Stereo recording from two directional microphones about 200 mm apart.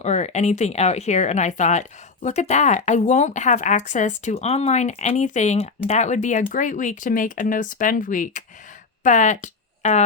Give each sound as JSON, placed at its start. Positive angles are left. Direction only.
{"t": 0.0, "sound": "speech", "side_deg": 35}